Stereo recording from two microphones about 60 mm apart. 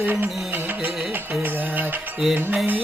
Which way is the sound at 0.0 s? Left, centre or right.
Right.